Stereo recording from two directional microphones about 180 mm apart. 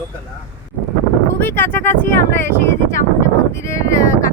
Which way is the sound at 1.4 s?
10° left (ahead or behind).